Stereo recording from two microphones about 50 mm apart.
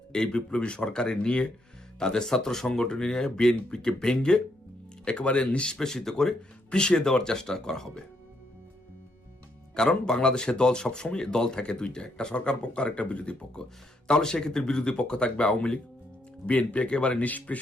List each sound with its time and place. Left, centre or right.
0.1 s speech: centre
9.9 s speech: centre